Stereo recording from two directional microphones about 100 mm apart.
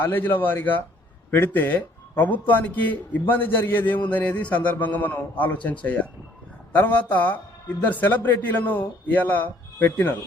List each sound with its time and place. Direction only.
0.0 s speech: 20° left (ahead or behind)